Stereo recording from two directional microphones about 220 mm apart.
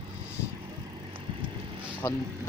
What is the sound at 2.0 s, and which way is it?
Speech, 10° left (ahead or behind).